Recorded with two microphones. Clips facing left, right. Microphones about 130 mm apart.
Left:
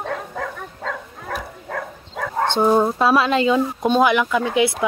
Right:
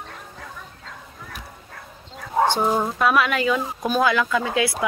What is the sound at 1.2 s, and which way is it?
Dog, 90° left.